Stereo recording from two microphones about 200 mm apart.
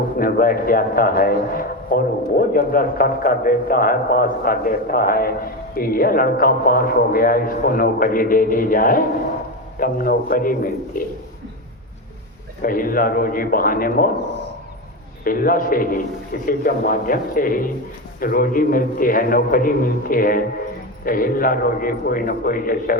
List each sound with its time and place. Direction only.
0.2 s a man's voice: 45° left (ahead or behind)
12.6 s a man's voice: 45° left (ahead or behind)
15.2 s a man's voice: 45° left (ahead or behind)